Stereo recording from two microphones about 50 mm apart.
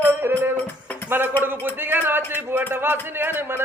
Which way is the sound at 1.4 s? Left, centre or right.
Right.